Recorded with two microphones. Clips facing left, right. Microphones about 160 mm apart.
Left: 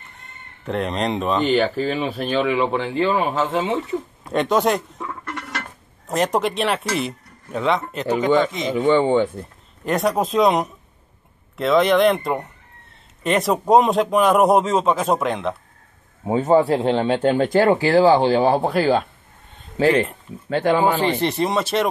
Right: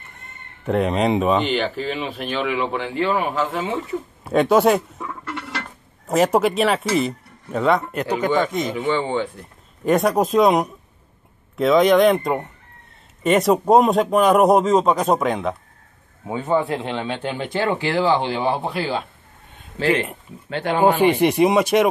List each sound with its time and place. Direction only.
0.7 s speech: 5° right (ahead or behind)
1.4 s speech: 40° left (ahead or behind); by 3.8 s 25° left (ahead or behind)
4.2 s a man's voice: 5° right (ahead or behind)
8.8 s speech: 20° left (ahead or behind)
9.8 s a man's voice: centre (ahead or behind)
16.3 s speech: 40° left (ahead or behind)
20.4 s speech: 40° left (ahead or behind)
20.8 s speech: 10° right (ahead or behind)